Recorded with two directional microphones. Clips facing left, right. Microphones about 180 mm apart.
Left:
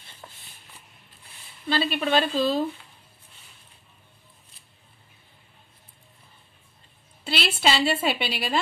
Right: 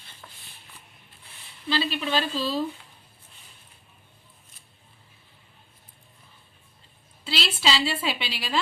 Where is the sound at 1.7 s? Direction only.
50° left (ahead or behind).